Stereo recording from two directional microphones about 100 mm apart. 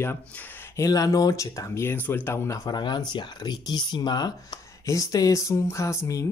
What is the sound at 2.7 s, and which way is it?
Speech, 45° left (ahead or behind).